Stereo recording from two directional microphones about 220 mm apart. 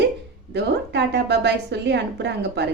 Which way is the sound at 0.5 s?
50° right (ahead or behind).